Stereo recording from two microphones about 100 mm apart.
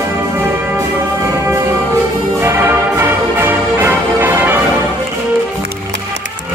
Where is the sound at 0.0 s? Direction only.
25° right (ahead or behind).